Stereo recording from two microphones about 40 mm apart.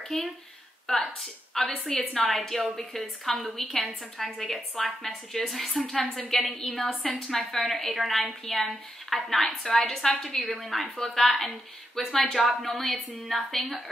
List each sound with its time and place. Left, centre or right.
0.1 s a woman's voice: centre
5.9 s a woman's voice: centre
6.2 s a woman's voice: centre